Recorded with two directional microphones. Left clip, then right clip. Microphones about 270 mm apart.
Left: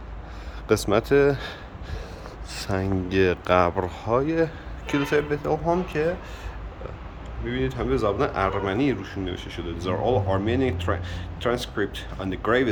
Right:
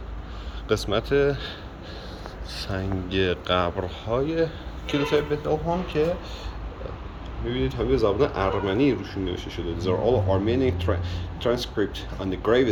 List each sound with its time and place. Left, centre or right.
0.7 s speech: left
2.5 s a sound: left
3.1 s speech: centre
7.4 s speech: centre